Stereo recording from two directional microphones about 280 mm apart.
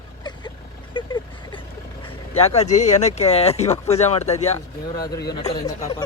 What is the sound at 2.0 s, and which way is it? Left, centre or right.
Speech, left.